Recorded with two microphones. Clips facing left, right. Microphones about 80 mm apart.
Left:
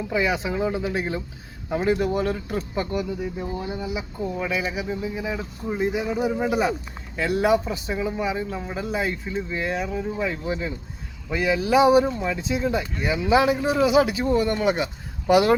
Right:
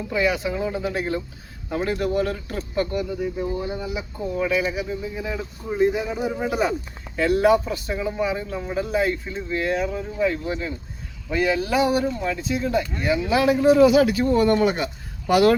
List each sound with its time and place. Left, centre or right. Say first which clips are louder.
0.1 s speech: right 2 dB; centre